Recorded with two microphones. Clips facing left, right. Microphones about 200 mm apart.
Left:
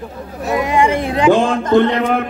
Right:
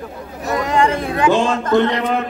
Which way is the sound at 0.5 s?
10° left (ahead or behind).